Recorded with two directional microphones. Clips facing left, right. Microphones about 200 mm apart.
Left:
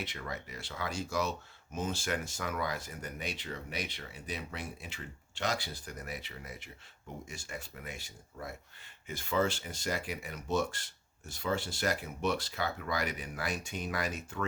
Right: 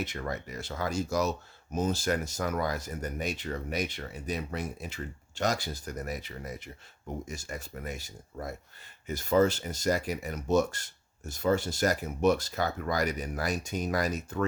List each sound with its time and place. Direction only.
0.0 s speech: 45° right (ahead or behind)